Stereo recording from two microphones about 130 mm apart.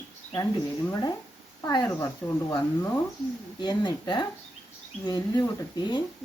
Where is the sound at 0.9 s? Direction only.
25° left (ahead or behind).